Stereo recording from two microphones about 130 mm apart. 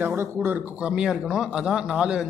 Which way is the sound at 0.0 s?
15° right (ahead or behind).